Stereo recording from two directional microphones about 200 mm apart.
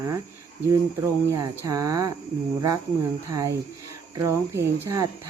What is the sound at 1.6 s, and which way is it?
Speech, 15° right (ahead or behind).